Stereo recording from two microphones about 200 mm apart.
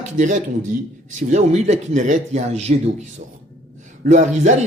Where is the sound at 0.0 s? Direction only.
40° right (ahead or behind).